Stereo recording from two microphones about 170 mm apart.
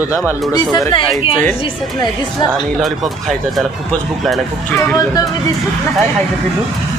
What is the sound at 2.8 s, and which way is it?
Speech, centre (ahead or behind).